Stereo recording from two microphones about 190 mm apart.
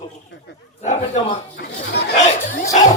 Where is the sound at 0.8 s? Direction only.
40° left (ahead or behind).